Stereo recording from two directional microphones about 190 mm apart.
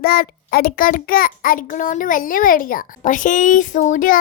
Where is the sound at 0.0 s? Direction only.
50° left (ahead or behind).